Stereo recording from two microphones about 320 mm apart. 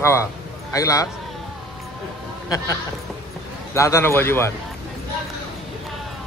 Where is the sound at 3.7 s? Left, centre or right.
Centre.